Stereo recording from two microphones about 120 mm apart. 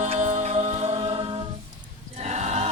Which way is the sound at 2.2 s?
65° right (ahead or behind).